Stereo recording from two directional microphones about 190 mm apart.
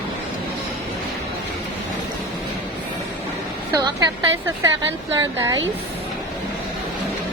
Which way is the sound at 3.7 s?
20° right (ahead or behind).